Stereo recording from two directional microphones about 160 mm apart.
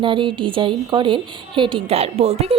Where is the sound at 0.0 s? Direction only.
30° right (ahead or behind).